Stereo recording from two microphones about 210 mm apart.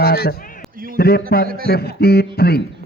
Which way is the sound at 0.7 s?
45° right (ahead or behind).